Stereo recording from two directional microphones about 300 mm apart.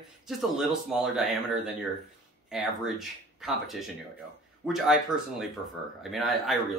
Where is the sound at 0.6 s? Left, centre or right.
Centre.